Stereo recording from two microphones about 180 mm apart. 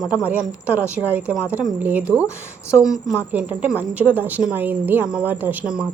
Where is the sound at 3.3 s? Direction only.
10° right (ahead or behind).